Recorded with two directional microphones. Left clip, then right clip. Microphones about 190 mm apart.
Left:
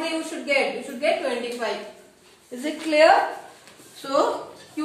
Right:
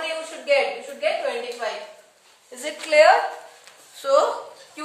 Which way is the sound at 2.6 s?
60° right (ahead or behind).